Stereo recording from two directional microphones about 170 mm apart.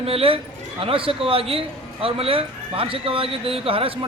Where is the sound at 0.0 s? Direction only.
35° right (ahead or behind).